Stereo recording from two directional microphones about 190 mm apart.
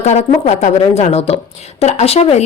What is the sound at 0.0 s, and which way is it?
Speech, 35° left (ahead or behind).